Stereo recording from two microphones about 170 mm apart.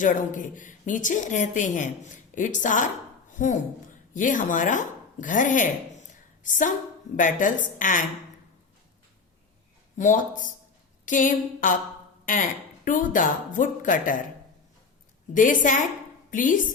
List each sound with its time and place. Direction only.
0.0 s a woman's voice: 50° left (ahead or behind)
10.0 s speech: 50° left (ahead or behind)
15.3 s speech: 50° left (ahead or behind)